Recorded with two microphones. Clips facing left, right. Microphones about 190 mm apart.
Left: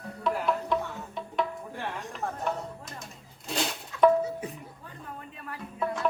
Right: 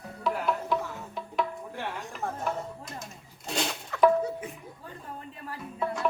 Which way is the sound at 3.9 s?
65° right (ahead or behind).